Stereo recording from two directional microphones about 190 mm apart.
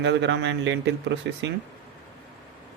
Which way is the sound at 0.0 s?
70° right (ahead or behind).